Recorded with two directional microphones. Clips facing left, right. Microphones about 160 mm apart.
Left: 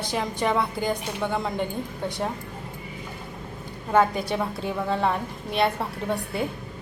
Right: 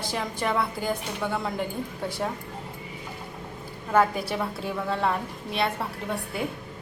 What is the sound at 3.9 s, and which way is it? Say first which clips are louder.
A woman's voice: left 2 dB; centre (ahead or behind).